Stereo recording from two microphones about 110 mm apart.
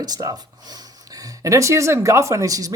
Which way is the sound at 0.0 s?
35° right (ahead or behind).